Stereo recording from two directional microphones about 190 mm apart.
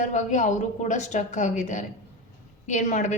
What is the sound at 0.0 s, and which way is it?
A woman's voice, 40° left (ahead or behind).